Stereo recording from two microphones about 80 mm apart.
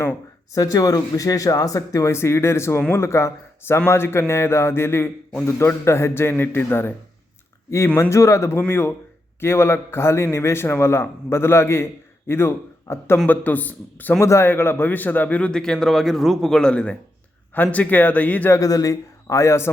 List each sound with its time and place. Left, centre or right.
0.5 s a man's voice: left
8.1 s a man's voice: left
14.2 s a man's voice: left
18.5 s speech: left